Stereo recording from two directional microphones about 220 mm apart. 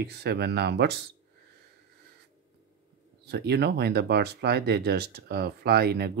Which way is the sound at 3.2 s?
50° right (ahead or behind).